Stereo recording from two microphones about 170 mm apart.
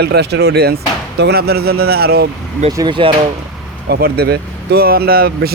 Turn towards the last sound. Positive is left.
turn(degrees=-65)  # may be behind; listen again after turning